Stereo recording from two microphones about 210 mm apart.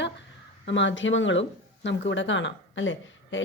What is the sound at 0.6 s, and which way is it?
A woman's voice, 60° left (ahead or behind).